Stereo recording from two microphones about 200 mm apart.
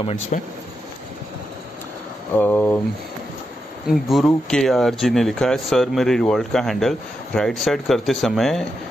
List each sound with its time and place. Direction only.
0.0 s speech: 35° left (ahead or behind)
2.3 s speech: 10° left (ahead or behind)
3.8 s speech: centre (ahead or behind)